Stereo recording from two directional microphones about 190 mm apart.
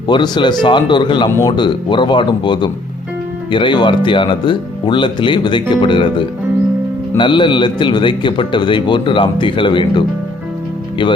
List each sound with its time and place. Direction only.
0.1 s a man's voice: 25° left (ahead or behind)